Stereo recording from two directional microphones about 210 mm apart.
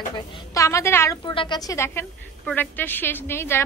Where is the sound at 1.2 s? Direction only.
25° left (ahead or behind).